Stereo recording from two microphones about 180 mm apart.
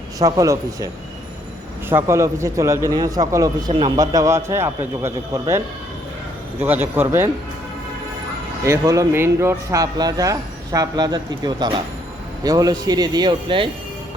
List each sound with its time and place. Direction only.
0.2 s speech: 20° right (ahead or behind)
1.9 s a man's voice: 15° right (ahead or behind)
8.6 s speech: 15° right (ahead or behind)